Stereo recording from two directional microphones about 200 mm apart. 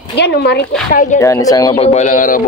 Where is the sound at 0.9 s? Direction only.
40° left (ahead or behind).